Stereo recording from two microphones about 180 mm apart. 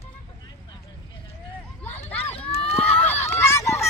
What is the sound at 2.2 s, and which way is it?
Run, 35° left (ahead or behind).